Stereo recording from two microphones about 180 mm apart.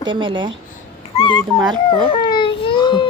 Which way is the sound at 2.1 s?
25° left (ahead or behind).